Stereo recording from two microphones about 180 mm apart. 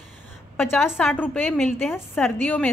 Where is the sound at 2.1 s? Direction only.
10° left (ahead or behind).